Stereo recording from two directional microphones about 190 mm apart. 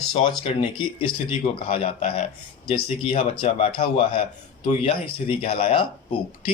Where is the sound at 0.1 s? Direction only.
25° left (ahead or behind).